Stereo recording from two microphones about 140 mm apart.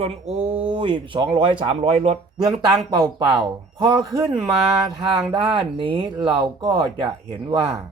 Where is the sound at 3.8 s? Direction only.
35° right (ahead or behind).